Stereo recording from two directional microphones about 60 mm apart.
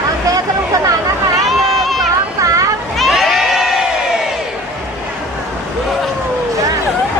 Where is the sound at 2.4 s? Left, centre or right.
Right.